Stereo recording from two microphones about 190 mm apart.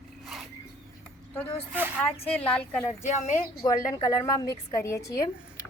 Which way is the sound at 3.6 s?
20° left (ahead or behind).